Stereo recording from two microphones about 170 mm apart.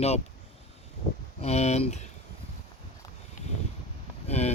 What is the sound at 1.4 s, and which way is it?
Speech, 40° left (ahead or behind).